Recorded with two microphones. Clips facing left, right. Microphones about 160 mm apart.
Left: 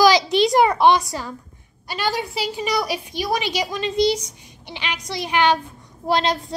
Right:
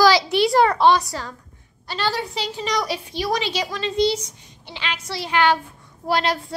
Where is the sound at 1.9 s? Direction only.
15° left (ahead or behind).